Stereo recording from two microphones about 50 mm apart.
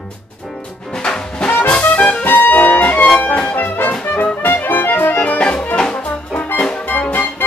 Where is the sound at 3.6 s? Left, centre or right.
Left.